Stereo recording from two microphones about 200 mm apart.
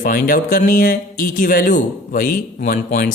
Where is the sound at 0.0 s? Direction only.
45° left (ahead or behind).